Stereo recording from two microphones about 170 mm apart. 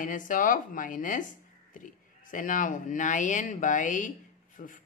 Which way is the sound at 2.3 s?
50° left (ahead or behind).